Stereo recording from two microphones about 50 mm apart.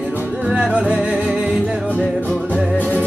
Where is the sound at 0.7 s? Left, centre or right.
Right.